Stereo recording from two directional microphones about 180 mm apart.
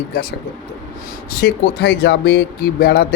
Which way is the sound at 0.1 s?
55° left (ahead or behind).